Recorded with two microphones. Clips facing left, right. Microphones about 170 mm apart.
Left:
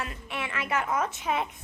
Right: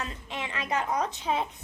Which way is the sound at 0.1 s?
20° right (ahead or behind).